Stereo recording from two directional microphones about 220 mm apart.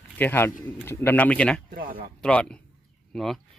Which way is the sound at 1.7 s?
40° right (ahead or behind).